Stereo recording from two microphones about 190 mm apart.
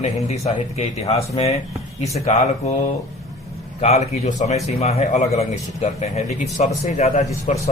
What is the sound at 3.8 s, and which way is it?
A man's voice, 35° left (ahead or behind).